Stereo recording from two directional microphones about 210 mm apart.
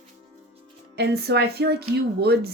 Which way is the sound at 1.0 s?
50° right (ahead or behind).